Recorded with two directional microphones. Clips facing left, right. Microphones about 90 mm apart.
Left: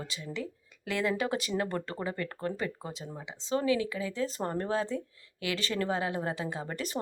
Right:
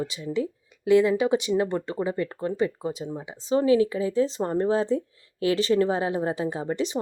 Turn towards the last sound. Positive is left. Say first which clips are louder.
# right 8 dB
turn(degrees=-20)  # may be behind; listen again after turning